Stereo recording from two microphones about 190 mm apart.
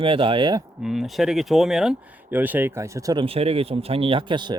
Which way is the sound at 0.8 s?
Centre (ahead or behind).